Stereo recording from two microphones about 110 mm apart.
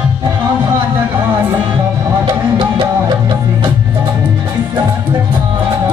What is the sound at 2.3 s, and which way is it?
Music, 45° right (ahead or behind).